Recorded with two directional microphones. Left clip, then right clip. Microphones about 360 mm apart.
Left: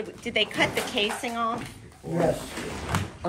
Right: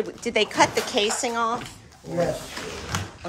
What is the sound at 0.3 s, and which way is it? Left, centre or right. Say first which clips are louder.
Speech: right 4 dB; centre.